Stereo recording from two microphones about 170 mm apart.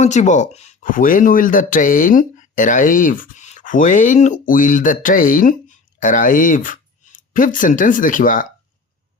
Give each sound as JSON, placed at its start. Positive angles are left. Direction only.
{"t": 0.0, "sound": "speech", "side_deg": 45}